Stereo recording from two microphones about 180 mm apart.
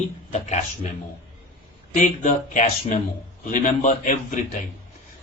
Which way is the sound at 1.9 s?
45° left (ahead or behind).